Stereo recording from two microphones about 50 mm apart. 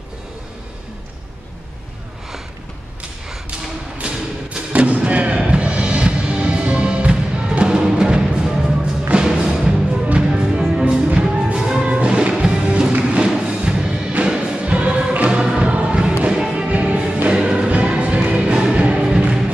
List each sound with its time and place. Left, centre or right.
4.7 s music: right